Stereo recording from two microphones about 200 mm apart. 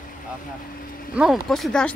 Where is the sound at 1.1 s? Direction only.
Centre (ahead or behind).